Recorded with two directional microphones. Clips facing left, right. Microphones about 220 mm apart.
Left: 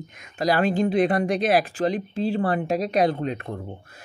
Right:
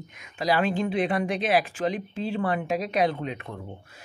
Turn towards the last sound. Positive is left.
turn(degrees=40)  # may be behind; listen again after turning